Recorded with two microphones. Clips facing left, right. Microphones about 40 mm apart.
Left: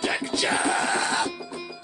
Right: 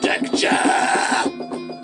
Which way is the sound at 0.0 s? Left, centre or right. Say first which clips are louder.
Right 7 dB; right.